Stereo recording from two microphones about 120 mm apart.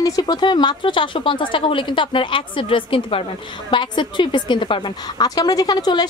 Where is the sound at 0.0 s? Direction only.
30° left (ahead or behind).